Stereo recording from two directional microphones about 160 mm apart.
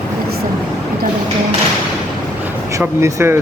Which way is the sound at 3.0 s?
15° right (ahead or behind).